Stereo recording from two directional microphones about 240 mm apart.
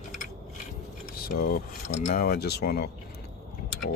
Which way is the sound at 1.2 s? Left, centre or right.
Left.